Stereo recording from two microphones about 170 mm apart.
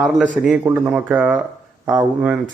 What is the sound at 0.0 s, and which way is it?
A man's voice, centre (ahead or behind).